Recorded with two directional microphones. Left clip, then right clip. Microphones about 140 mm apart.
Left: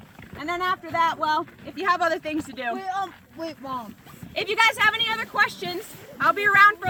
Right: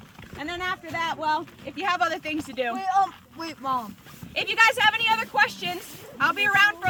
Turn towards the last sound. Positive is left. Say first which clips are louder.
# left 4 dB
turn(degrees=-35)  # may be behind; listen again after turning